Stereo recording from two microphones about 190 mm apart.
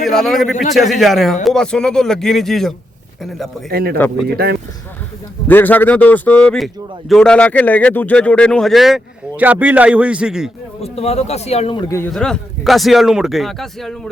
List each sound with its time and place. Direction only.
0.0 s speech: centre (ahead or behind)
3.7 s speech: 55° right (ahead or behind)
3.9 s a man's voice: 10° left (ahead or behind)
5.5 s a man's voice: 10° left (ahead or behind)
10.8 s a man's voice: 30° left (ahead or behind)
11.9 s speech: 5° left (ahead or behind)